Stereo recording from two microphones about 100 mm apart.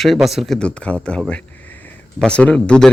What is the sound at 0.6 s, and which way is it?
Speech, 10° left (ahead or behind).